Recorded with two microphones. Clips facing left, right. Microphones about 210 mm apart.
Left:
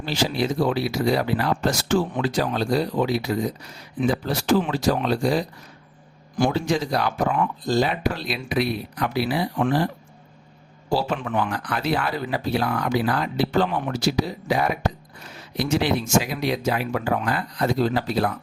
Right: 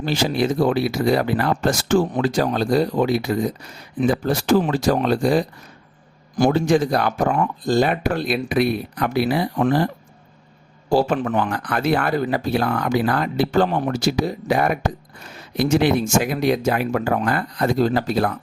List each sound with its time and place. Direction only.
0.0 s speech: 50° right (ahead or behind)